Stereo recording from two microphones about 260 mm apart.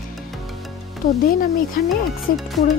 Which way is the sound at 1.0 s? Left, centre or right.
Left.